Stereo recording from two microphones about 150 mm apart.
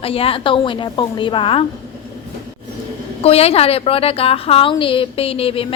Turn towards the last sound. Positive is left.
turn(degrees=40)  # may be behind; listen again after turning